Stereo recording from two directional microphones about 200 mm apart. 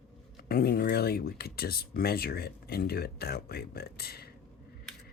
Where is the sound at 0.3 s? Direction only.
50° left (ahead or behind).